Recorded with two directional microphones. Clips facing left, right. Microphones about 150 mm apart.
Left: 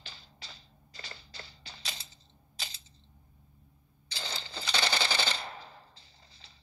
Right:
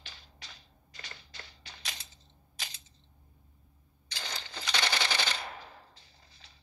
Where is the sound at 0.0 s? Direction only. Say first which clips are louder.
Left 2 dB; 30° left (ahead or behind).